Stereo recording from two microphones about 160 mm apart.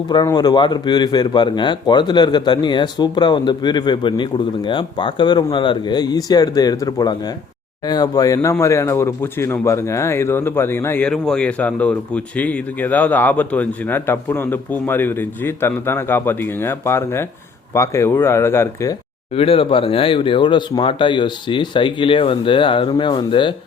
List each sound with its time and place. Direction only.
0.3 s speech: 25° left (ahead or behind)
19.4 s speech: 35° left (ahead or behind)